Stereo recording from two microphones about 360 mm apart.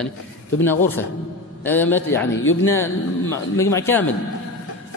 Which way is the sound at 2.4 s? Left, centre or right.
Left.